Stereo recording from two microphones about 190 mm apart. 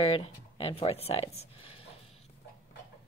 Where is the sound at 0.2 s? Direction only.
30° left (ahead or behind).